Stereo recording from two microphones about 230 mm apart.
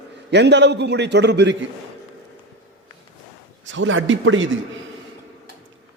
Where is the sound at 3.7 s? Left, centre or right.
Right.